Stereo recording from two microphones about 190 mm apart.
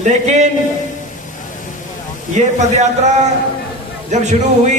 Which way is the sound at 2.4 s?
40° right (ahead or behind).